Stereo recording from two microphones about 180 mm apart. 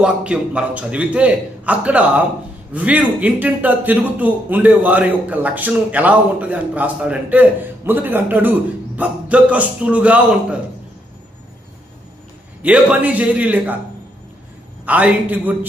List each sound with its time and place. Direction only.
0.0 s a man's voice: 5° right (ahead or behind)
12.6 s a man's voice: 10° right (ahead or behind)
14.8 s a man's voice: 10° right (ahead or behind)